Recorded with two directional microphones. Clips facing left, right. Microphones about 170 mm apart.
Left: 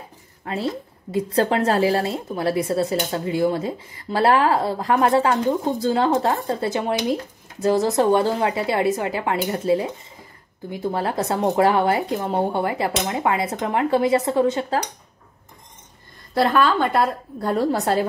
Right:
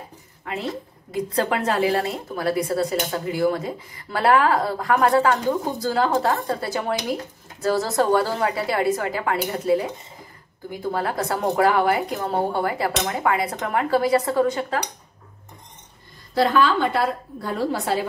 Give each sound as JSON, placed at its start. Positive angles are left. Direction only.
{"t": 0.5, "sound": "a woman's voice", "side_deg": 35}
{"t": 17.4, "sound": "a woman's voice", "side_deg": 45}